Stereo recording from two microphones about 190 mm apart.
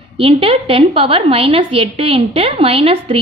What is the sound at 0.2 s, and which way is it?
A woman's voice, 30° right (ahead or behind).